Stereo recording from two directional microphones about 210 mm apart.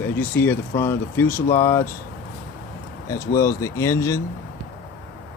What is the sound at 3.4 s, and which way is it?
Speech, 15° left (ahead or behind).